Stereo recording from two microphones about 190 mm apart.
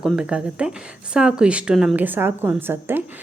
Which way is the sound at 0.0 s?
5° right (ahead or behind).